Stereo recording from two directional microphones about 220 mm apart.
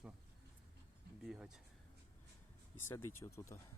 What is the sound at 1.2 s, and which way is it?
Speech, centre (ahead or behind).